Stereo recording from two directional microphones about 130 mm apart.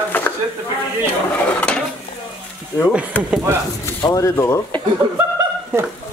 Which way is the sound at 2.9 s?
10° right (ahead or behind).